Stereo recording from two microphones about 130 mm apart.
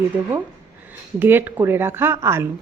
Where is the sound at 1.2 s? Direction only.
15° right (ahead or behind).